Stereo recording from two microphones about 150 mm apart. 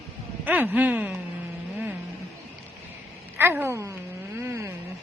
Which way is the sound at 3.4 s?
15° right (ahead or behind).